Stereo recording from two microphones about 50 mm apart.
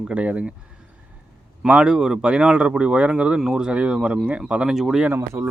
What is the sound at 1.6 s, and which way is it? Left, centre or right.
Speech, centre.